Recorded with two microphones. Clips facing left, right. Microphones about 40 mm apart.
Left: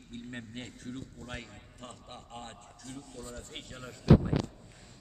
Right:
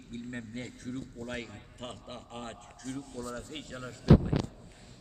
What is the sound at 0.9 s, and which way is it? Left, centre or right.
Speech, right.